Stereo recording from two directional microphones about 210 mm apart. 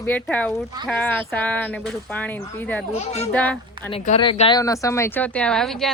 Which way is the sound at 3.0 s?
30° left (ahead or behind).